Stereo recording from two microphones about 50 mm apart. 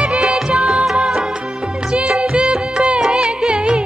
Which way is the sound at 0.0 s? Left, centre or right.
Right.